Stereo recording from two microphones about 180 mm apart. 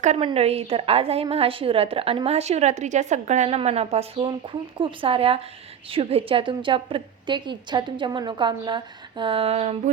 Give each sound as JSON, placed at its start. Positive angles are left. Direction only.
{"t": 0.0, "sound": "a woman's voice", "side_deg": -40}